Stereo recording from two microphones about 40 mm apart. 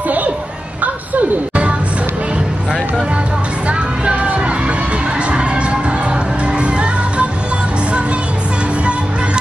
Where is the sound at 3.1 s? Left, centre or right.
Right.